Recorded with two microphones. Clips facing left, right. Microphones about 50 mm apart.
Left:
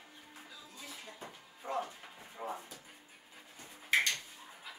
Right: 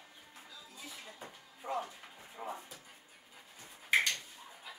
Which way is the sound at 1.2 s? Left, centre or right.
Centre.